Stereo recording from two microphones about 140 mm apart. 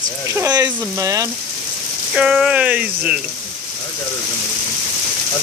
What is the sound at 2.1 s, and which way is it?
Speech, 5° right (ahead or behind).